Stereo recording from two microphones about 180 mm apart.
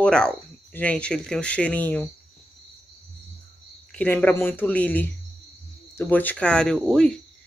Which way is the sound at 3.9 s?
5° left (ahead or behind).